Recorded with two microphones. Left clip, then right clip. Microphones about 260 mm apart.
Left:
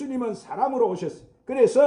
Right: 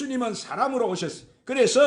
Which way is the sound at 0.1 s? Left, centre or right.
Right.